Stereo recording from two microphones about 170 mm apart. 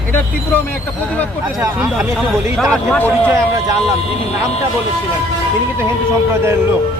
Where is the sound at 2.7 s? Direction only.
5° left (ahead or behind).